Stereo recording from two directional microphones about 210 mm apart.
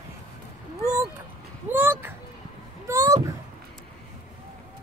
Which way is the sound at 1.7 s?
10° right (ahead or behind).